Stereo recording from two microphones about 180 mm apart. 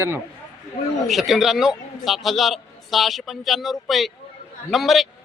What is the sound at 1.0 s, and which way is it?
A man's voice, centre (ahead or behind).